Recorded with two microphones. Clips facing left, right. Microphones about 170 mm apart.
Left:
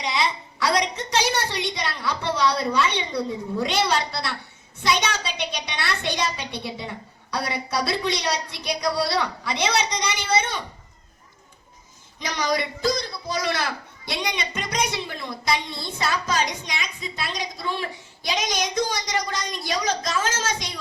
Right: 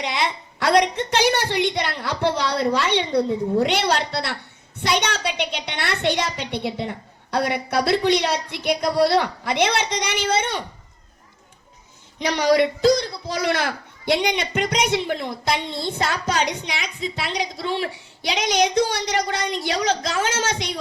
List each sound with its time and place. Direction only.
0.0 s a sound: 60° right (ahead or behind)
1.7 s a woman's voice: 60° right (ahead or behind)
12.2 s a woman's voice: 60° right (ahead or behind)